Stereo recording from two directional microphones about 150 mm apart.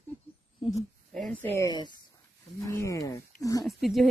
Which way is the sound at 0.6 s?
40° left (ahead or behind).